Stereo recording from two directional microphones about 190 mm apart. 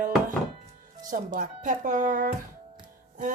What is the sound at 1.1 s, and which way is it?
Speech, 45° right (ahead or behind).